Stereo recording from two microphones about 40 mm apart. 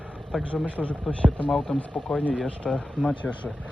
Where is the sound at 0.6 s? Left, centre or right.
Left.